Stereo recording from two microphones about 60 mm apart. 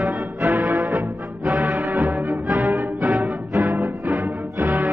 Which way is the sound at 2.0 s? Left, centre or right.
Right.